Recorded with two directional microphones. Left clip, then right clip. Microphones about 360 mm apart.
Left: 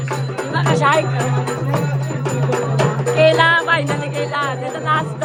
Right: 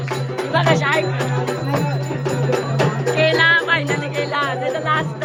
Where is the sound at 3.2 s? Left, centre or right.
Centre.